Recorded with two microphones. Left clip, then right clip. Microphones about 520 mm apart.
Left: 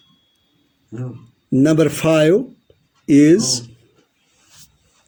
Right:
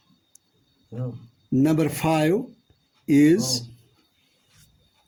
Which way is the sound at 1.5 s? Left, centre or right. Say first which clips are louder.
Left 7 dB; right.